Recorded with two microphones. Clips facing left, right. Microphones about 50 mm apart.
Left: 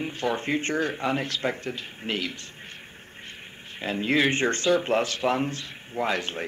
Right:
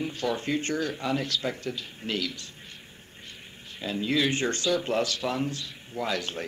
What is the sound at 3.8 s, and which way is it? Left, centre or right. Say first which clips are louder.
Speech: left 3 dB; left.